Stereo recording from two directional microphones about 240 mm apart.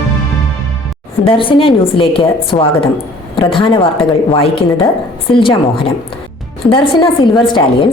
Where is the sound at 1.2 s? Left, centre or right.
Left.